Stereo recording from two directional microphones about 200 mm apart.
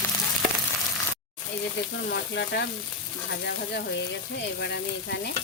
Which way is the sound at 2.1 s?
60° left (ahead or behind).